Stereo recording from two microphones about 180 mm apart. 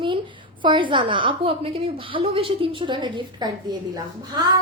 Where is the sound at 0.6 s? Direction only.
25° right (ahead or behind).